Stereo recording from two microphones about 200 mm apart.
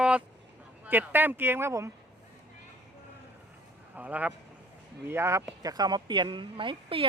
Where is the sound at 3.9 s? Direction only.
5° right (ahead or behind); by 7.1 s 25° right (ahead or behind).